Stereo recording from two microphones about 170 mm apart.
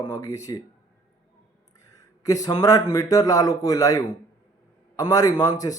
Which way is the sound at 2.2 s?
20° left (ahead or behind).